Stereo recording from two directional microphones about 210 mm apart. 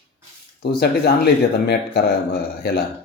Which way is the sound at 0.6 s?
50° left (ahead or behind).